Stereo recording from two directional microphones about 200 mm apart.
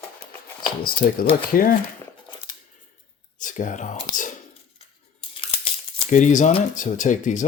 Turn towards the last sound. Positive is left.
turn(degrees=40)  # may be behind; listen again after turning